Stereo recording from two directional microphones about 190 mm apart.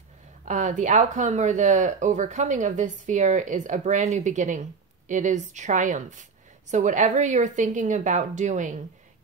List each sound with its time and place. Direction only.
0.5 s speech: 40° right (ahead or behind)